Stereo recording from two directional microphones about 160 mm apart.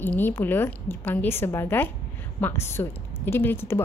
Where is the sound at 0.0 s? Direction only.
10° left (ahead or behind).